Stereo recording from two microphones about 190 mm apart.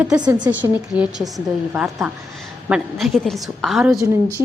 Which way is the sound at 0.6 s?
15° right (ahead or behind).